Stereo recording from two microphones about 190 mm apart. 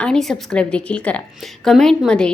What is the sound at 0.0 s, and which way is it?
A woman's voice, 5° left (ahead or behind).